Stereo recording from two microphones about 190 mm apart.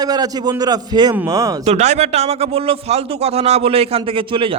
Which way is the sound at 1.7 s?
35° right (ahead or behind).